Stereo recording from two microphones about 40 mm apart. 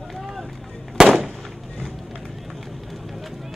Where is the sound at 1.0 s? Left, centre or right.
Centre.